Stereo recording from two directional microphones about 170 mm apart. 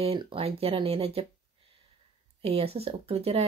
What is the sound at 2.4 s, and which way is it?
Speech, 35° right (ahead or behind).